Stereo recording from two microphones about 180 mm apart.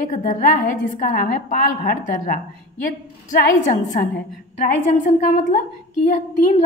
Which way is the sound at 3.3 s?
45° left (ahead or behind).